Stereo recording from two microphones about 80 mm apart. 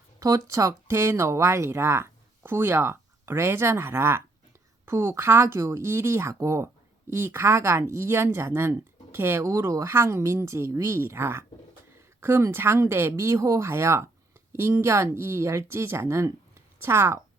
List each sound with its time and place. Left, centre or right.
0.2 s speech: right